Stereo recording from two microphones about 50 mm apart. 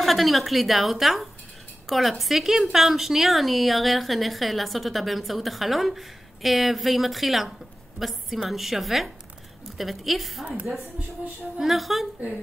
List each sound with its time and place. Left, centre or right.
0.0 s a woman's voice: centre
11.5 s a woman's voice: centre